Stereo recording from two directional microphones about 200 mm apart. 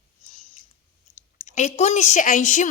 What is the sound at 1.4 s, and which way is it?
A woman's voice, 35° left (ahead or behind).